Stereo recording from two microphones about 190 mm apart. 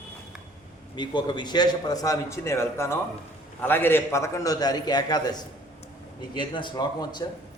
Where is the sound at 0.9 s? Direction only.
25° left (ahead or behind).